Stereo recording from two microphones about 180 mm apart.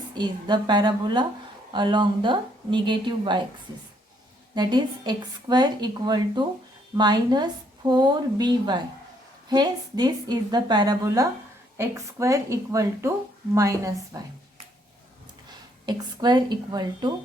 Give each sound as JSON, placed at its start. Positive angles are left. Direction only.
{"t": 0.2, "sound": "a woman's voice", "side_deg": -25}
{"t": 4.5, "sound": "a woman's voice", "side_deg": -25}
{"t": 15.9, "sound": "a woman's voice", "side_deg": -25}